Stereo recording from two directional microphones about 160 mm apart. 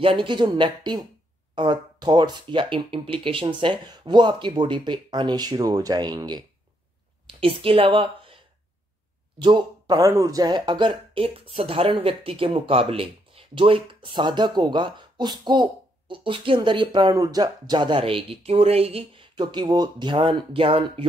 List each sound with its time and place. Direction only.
0.0 s speech: 30° right (ahead or behind)
9.4 s speech: 30° right (ahead or behind)